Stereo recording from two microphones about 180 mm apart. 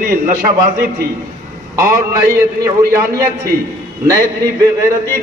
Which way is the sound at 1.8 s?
15° right (ahead or behind).